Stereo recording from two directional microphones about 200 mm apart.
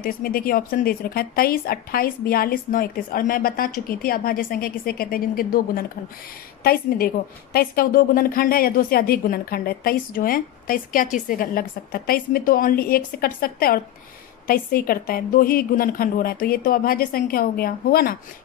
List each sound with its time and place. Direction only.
0.0 s a woman's voice: 45° left (ahead or behind)